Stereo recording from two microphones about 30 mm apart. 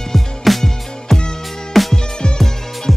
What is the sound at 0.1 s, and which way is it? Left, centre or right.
Music, centre.